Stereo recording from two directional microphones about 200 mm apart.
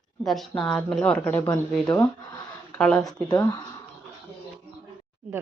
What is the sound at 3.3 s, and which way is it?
Speech, 20° left (ahead or behind).